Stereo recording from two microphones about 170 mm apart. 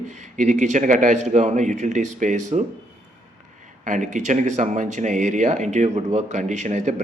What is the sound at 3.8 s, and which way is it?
Speech, 50° right (ahead or behind).